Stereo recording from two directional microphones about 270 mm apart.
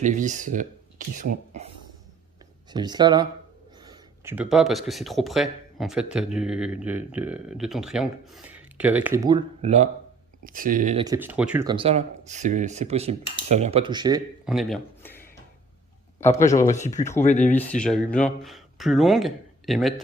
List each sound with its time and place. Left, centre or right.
0.0 s speech: right
2.7 s speech: centre
9.6 s speech: right
11.0 s speech: centre
11.7 s speech: right
14.4 s a sound: centre
16.2 s a man's voice: centre
16.7 s speech: left
17.5 s speech: centre